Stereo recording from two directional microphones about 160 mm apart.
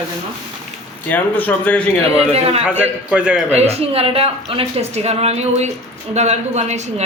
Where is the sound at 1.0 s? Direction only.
10° left (ahead or behind).